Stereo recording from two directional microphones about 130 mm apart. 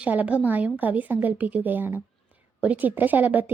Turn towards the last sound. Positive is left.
turn(degrees=-15)  # may be behind; listen again after turning